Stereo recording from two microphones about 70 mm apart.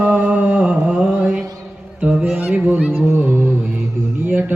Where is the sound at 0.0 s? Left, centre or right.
Right.